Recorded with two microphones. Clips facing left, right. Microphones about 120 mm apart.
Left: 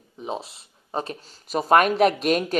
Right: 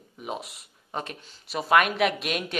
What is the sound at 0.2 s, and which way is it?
Speech, 30° left (ahead or behind).